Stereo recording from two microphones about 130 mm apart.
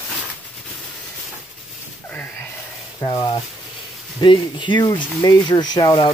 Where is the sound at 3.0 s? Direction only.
30° left (ahead or behind).